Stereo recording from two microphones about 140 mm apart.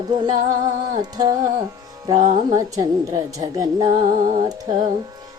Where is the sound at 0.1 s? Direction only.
30° right (ahead or behind).